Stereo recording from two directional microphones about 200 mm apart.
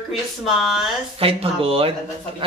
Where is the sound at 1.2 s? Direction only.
30° right (ahead or behind).